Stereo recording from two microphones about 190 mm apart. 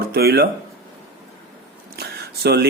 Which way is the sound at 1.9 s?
55° right (ahead or behind).